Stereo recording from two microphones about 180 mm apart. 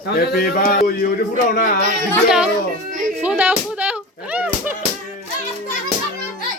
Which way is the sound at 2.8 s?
45° right (ahead or behind).